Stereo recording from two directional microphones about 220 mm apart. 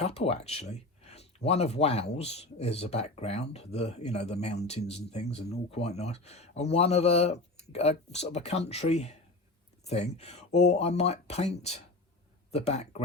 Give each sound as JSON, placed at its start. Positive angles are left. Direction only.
{"t": 0.0, "sound": "speech", "side_deg": 30}